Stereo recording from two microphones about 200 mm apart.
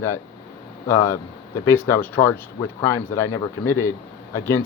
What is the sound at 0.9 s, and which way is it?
Speech, 15° left (ahead or behind).